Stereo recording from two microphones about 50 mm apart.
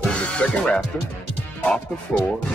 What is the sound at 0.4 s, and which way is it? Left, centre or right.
Speech, left.